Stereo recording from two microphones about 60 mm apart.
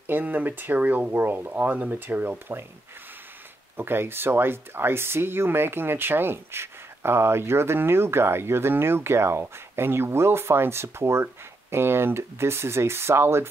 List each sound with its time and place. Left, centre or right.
0.0 s speech: right
3.7 s speech: right